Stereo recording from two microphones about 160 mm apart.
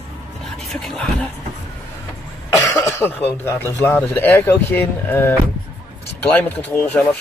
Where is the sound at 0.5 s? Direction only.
5° left (ahead or behind).